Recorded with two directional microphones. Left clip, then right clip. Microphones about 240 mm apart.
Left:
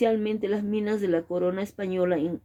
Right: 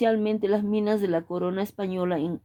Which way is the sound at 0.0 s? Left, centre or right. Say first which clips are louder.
Right 1 dB; right.